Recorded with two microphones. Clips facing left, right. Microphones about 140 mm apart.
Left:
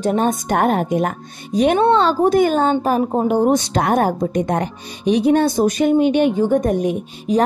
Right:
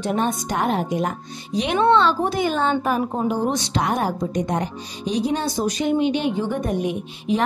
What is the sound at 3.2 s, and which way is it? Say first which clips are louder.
Speech: left 7 dB; 55° left (ahead or behind).